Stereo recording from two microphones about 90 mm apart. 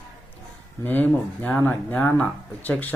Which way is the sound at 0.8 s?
20° left (ahead or behind).